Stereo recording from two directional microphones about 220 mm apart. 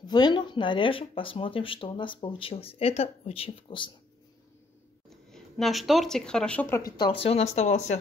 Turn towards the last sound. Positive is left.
turn(degrees=30)  # may be behind; listen again after turning